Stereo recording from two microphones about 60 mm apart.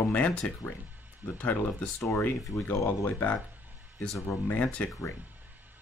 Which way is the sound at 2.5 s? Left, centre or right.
Left.